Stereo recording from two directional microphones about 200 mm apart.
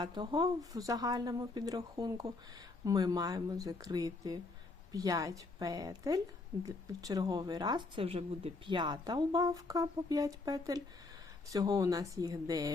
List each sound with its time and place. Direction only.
0.0 s speech: 20° right (ahead or behind)